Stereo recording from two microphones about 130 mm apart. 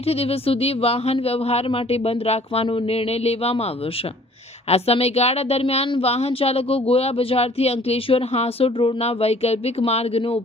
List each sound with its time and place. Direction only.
0.1 s a woman's voice: 50° left (ahead or behind)
4.7 s a woman's voice: 50° left (ahead or behind)